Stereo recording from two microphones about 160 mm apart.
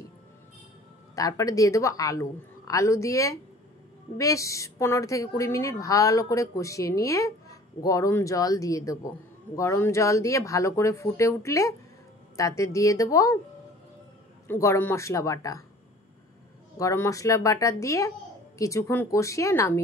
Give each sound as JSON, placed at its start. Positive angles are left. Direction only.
{"t": 1.1, "sound": "a woman's voice", "side_deg": 20}
{"t": 14.5, "sound": "a woman's voice", "side_deg": 15}
{"t": 16.7, "sound": "a woman's voice", "side_deg": 20}